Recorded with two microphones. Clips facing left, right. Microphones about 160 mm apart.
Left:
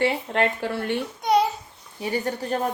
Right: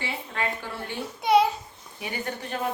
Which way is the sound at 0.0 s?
70° left (ahead or behind).